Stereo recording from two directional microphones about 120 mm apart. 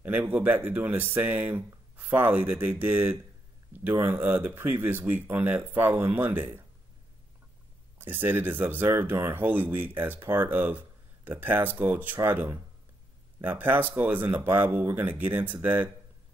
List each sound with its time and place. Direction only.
0.0 s speech: 15° right (ahead or behind)
8.0 s speech: 15° right (ahead or behind)